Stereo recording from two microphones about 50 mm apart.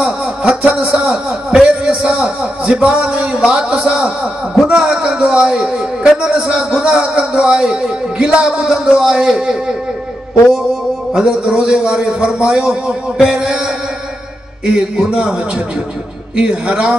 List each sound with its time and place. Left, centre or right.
0.0 s a sound: centre
1.0 s a man's voice: centre
11.1 s a man's voice: centre
14.7 s a man's voice: centre
16.3 s a man's voice: right